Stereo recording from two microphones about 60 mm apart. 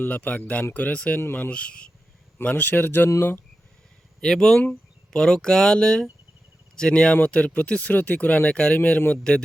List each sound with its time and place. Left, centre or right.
0.0 s speech: left
1.2 s speech: left
1.5 s speech: centre
3.2 s speech: left
4.2 s speech: centre; by 9.1 s left
9.1 s speech: centre